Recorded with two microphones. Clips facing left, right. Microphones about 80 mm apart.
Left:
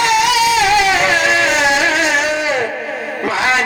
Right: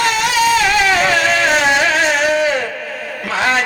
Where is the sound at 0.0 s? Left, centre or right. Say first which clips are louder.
Left 2 dB; right.